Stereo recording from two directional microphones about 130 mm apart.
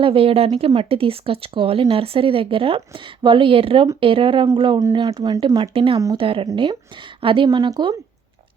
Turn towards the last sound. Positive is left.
turn(degrees=-35)  # may be behind; listen again after turning